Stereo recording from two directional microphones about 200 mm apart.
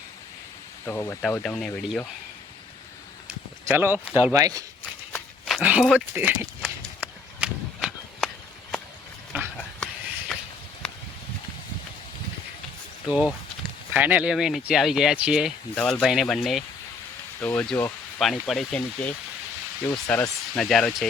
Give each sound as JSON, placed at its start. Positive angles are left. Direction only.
{"t": 0.9, "sound": "speech", "side_deg": 15}
{"t": 3.7, "sound": "speech", "side_deg": -10}
{"t": 5.5, "sound": "speech", "side_deg": -5}
{"t": 6.6, "sound": "a sound", "side_deg": -5}
{"t": 9.6, "sound": "a sound", "side_deg": 5}
{"t": 13.9, "sound": "speech", "side_deg": -10}